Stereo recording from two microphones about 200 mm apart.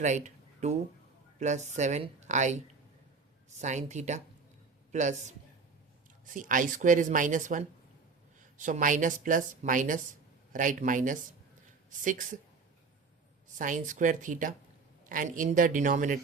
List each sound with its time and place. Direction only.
0.0 s a woman's voice: 35° right (ahead or behind)
3.6 s a woman's voice: 35° right (ahead or behind)
13.6 s a woman's voice: 40° right (ahead or behind)